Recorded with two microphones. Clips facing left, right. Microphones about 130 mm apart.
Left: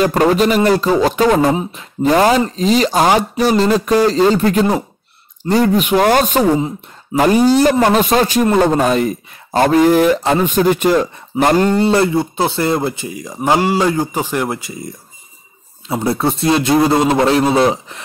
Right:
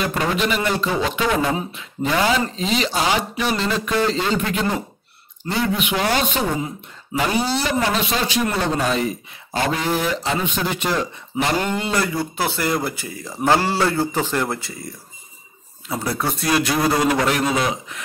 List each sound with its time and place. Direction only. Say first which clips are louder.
0.0 s a man's voice: left 9 dB; 40° left (ahead or behind); by 14.9 s 20° left (ahead or behind)
15.9 s speech: left 7 dB; 25° left (ahead or behind)